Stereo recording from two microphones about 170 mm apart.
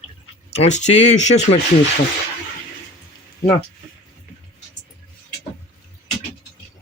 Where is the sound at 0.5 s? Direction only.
40° left (ahead or behind).